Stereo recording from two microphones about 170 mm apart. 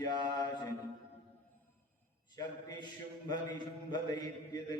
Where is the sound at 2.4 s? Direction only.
25° left (ahead or behind).